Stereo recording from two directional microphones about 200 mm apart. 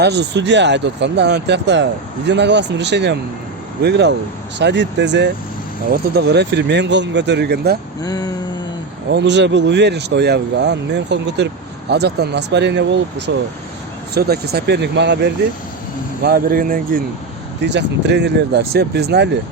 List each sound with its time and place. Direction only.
0.0 s speech: 60° right (ahead or behind)
8.0 s a sound: 20° left (ahead or behind)
9.0 s speech: 60° right (ahead or behind)
16.2 s speech: 50° right (ahead or behind)
17.6 s speech: 60° right (ahead or behind)